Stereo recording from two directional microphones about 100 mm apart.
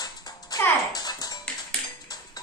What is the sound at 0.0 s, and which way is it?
Music, 40° left (ahead or behind).